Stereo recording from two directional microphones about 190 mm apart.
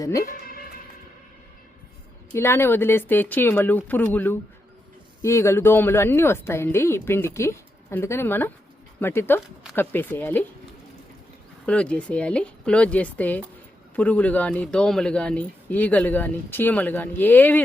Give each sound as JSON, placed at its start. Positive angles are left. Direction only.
{"t": 0.0, "sound": "speech", "side_deg": 15}
{"t": 2.3, "sound": "speech", "side_deg": 10}
{"t": 11.6, "sound": "speech", "side_deg": 5}